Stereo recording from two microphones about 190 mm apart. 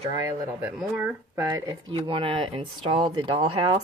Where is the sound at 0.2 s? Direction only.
15° right (ahead or behind).